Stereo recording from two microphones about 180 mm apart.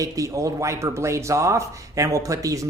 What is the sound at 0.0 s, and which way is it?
Speech, 20° right (ahead or behind).